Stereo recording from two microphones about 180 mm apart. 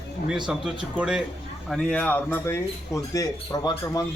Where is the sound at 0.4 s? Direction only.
5° right (ahead or behind).